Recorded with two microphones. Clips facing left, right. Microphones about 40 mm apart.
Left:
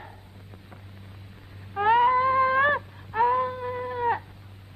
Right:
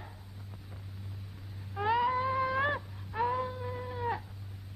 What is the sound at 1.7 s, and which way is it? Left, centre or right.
Cat, left.